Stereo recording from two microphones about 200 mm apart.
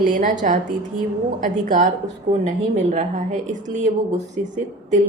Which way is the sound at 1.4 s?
40° right (ahead or behind).